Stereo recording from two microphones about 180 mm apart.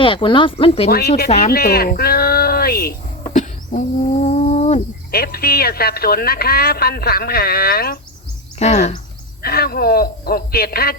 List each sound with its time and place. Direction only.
0.0 s speech: 30° left (ahead or behind)
0.9 s speech: 60° left (ahead or behind)
3.3 s a sound: 45° left (ahead or behind)
5.1 s speech: 60° left (ahead or behind)
8.5 s speech: 40° left (ahead or behind)
9.4 s speech: 55° left (ahead or behind)